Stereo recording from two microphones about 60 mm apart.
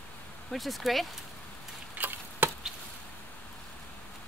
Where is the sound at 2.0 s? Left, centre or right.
Right.